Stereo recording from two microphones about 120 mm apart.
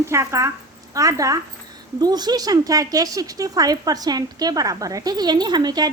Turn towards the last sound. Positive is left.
turn(degrees=-35)  # may be behind; listen again after turning